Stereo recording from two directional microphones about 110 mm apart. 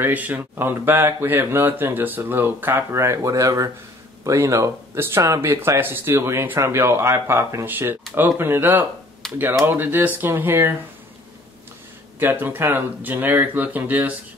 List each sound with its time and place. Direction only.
0.0 s speech: 15° right (ahead or behind)
9.2 s a sound: 5° left (ahead or behind)
9.7 s speech: 20° right (ahead or behind)
12.2 s speech: 20° right (ahead or behind)